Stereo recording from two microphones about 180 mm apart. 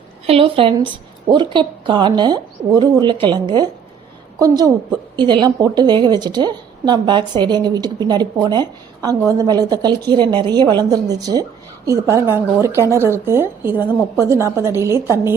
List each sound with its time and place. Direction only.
0.3 s a woman's voice: 30° right (ahead or behind); by 15.4 s 15° right (ahead or behind)